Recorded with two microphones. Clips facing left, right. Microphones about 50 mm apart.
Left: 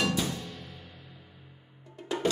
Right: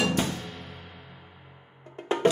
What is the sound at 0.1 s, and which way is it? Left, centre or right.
Music, right.